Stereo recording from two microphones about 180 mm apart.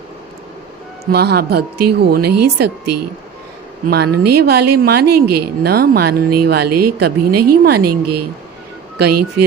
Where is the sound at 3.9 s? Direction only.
60° right (ahead or behind).